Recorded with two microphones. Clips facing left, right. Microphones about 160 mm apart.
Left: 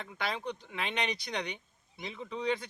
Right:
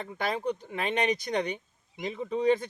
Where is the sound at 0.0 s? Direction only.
45° right (ahead or behind).